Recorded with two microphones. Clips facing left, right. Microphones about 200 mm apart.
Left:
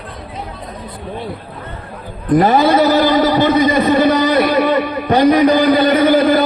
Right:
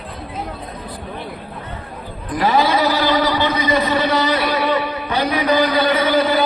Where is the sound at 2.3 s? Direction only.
50° left (ahead or behind).